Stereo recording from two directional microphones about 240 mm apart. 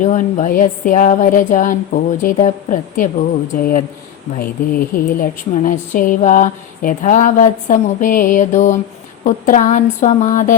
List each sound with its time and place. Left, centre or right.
0.0 s speech: left